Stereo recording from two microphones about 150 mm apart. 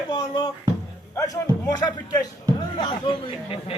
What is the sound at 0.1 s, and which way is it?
Speech, 30° left (ahead or behind).